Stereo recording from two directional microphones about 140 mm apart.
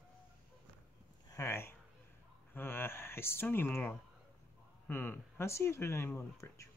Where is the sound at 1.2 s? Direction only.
20° left (ahead or behind).